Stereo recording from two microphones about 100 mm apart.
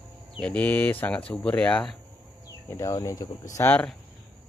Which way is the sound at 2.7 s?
35° left (ahead or behind).